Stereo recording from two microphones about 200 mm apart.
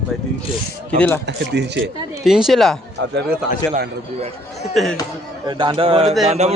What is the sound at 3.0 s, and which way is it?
Speech, 60° right (ahead or behind).